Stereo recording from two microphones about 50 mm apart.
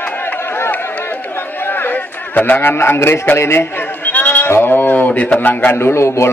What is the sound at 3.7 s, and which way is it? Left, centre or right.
Sheep, left.